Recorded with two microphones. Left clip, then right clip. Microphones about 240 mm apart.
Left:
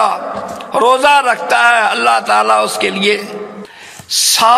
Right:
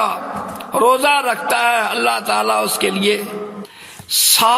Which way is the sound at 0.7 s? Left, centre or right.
Right.